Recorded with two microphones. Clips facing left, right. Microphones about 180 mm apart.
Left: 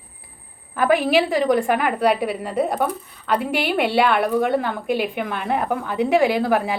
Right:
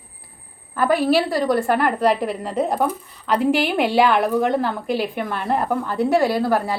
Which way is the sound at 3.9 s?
10° right (ahead or behind).